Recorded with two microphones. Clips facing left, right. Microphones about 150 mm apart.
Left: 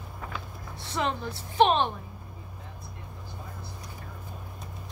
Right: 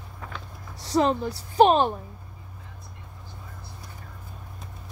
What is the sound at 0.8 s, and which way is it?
A woman's voice, 40° right (ahead or behind).